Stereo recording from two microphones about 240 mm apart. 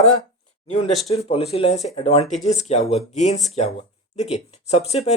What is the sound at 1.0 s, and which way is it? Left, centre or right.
Speech, left.